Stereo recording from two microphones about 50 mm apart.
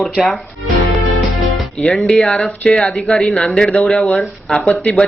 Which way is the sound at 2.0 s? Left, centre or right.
Centre.